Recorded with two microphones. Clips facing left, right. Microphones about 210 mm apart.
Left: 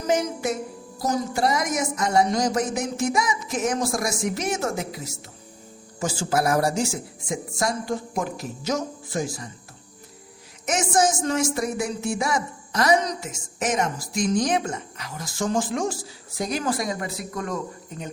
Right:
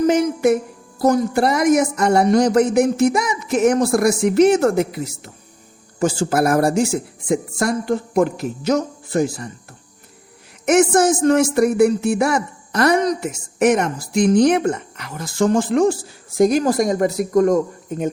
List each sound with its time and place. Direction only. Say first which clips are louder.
0.1 s speech: right 8 dB; 60° right (ahead or behind)
10.7 s speech: right 8 dB; 60° right (ahead or behind)